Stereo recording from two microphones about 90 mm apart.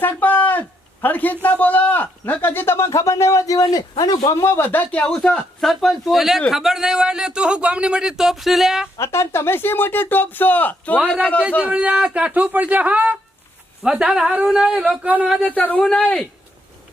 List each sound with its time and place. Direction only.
0.0 s a sound: 20° left (ahead or behind)
1.0 s a man's voice: 20° left (ahead or behind); by 4.4 s 45° left (ahead or behind)
4.4 s speech: 30° left (ahead or behind); by 8.9 s 5° right (ahead or behind)
9.0 s a man's voice: 30° left (ahead or behind); by 11.4 s 15° left (ahead or behind)
11.7 s speech: 10° right (ahead or behind)
15.5 s speech: 15° left (ahead or behind)